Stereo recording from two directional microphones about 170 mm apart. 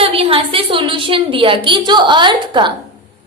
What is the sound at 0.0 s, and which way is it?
A woman's voice, 35° right (ahead or behind).